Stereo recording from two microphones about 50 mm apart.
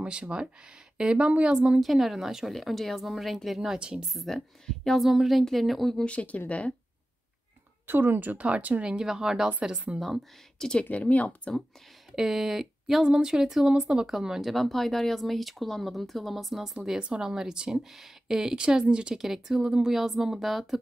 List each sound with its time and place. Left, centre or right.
0.0 s speech: right
1.8 s speech: centre
4.1 s speech: centre
4.6 s speech: centre
5.0 s speech: centre
6.0 s speech: left
7.8 s speech: right
8.8 s speech: centre
9.9 s speech: centre
10.8 s speech: left
12.2 s speech: centre